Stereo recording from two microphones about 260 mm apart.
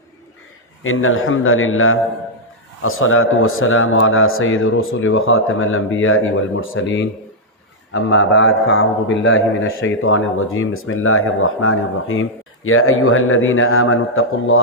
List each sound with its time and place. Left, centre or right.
0.9 s a man's voice: left